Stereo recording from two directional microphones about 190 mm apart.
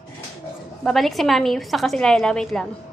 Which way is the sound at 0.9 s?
Centre (ahead or behind).